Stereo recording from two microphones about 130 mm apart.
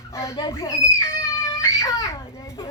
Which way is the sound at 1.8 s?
25° left (ahead or behind).